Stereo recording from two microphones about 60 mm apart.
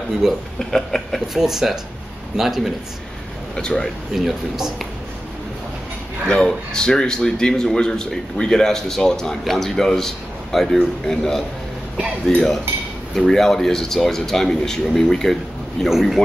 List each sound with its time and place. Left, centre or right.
0.2 s a man's voice: centre
0.6 s speech: centre
1.3 s speech: centre
3.5 s speech: centre
4.1 s speech: centre
6.2 s speech: centre